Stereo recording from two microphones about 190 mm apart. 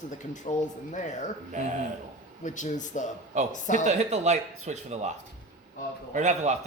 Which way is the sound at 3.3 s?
40° right (ahead or behind).